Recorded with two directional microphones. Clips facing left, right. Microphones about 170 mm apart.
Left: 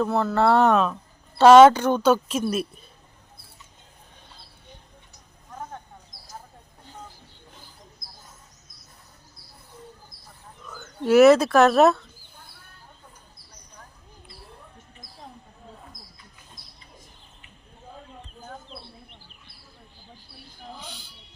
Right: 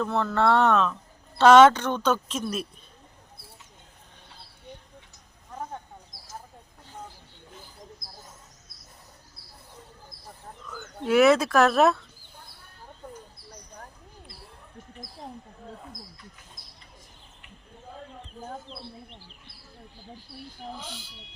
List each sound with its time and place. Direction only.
0.0 s speech: 5° left (ahead or behind)
10.7 s speech: centre (ahead or behind)
18.4 s bird: 30° right (ahead or behind)
20.7 s a sound: centre (ahead or behind)